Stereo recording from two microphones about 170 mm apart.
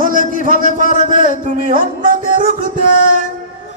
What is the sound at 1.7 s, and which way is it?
Music, 55° right (ahead or behind).